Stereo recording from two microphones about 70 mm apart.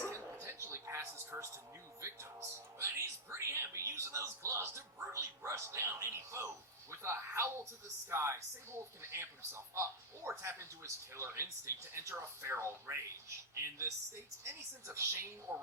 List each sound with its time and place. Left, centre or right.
0.1 s a sound: right
2.0 s music: right
6.9 s television: right
8.1 s a woman's voice: right